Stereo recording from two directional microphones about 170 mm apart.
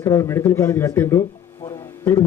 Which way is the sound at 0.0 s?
15° left (ahead or behind).